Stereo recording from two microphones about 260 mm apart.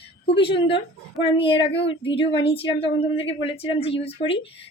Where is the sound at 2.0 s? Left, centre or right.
Left.